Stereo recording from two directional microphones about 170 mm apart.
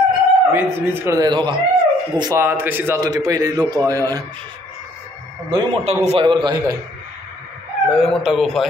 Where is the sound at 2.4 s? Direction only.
10° right (ahead or behind).